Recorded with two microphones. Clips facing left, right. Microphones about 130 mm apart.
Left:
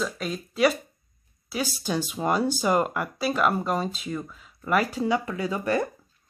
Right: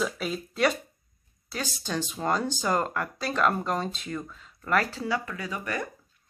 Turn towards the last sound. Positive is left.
turn(degrees=30)  # may be behind; listen again after turning